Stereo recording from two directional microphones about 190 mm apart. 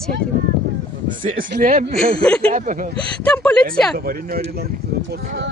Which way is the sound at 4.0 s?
50° right (ahead or behind).